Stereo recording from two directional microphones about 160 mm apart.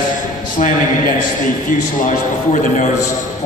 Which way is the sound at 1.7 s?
55° left (ahead or behind).